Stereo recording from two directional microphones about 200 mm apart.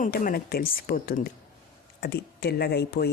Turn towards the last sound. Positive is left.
turn(degrees=55)  # may be behind; listen again after turning